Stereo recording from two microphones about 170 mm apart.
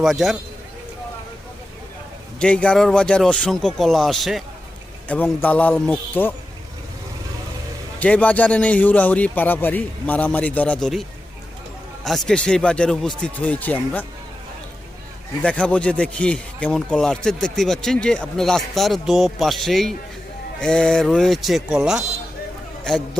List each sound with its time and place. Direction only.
0.0 s speech: centre (ahead or behind)
2.4 s a man's voice: 5° left (ahead or behind)
7.9 s a man's voice: 10° left (ahead or behind)
12.0 s speech: centre (ahead or behind)
15.4 s speech: 5° left (ahead or behind)